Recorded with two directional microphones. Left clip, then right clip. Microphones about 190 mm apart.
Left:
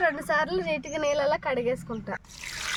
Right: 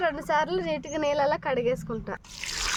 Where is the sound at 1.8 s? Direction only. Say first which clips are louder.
Even; 20° right (ahead or behind).